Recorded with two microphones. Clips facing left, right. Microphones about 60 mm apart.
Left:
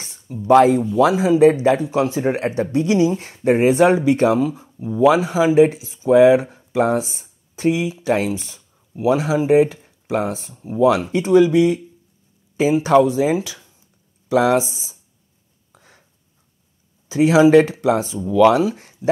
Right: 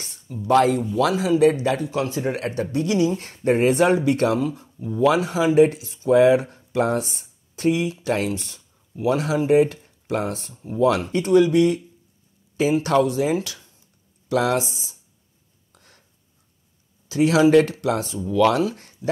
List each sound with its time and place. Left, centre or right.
0.3 s speech: centre
15.7 s a sound: centre
17.1 s speech: left